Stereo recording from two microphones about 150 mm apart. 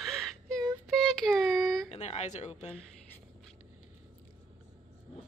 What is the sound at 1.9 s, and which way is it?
Speech, 45° left (ahead or behind).